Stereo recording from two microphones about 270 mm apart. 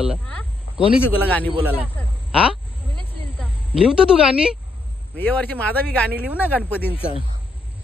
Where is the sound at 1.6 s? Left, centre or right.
Centre.